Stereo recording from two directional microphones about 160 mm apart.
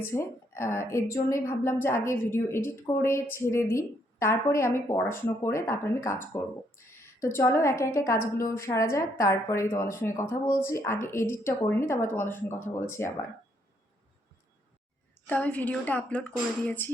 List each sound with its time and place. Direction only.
0.0 s a woman's voice: 15° left (ahead or behind)
15.3 s a woman's voice: 10° left (ahead or behind)